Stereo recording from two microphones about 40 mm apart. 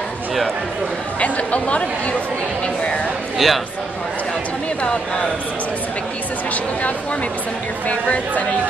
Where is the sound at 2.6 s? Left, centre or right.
Left.